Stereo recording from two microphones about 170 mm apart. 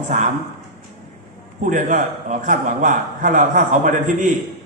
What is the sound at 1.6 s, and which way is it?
A man's voice, 50° right (ahead or behind).